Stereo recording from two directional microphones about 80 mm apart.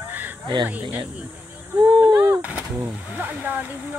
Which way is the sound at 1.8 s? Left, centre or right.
Right.